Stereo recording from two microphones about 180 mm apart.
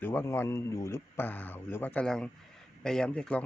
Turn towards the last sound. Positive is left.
turn(degrees=5)  # may be behind; listen again after turning